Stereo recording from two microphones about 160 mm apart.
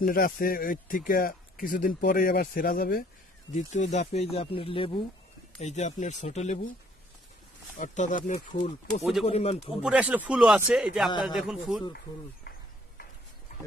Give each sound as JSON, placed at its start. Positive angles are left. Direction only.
{"t": 0.0, "sound": "speech", "side_deg": 65}
{"t": 3.5, "sound": "speech", "side_deg": 50}
{"t": 5.6, "sound": "speech", "side_deg": 45}
{"t": 7.7, "sound": "speech", "side_deg": 50}
{"t": 9.2, "sound": "speech", "side_deg": 40}
{"t": 9.8, "sound": "speech", "side_deg": -10}